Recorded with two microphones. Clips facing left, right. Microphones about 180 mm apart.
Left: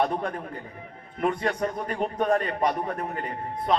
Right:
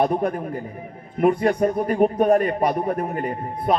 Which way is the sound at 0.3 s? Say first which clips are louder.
Right 7 dB; 30° right (ahead or behind).